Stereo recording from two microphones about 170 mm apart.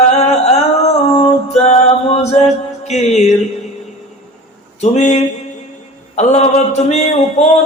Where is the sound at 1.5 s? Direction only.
40° left (ahead or behind).